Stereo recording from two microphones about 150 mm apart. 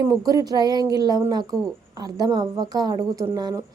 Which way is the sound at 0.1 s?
25° right (ahead or behind).